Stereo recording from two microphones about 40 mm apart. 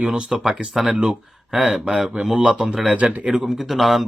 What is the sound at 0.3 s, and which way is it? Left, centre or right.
Speech, centre.